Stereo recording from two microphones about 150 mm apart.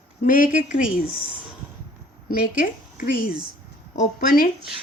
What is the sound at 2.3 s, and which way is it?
Speech, 75° left (ahead or behind).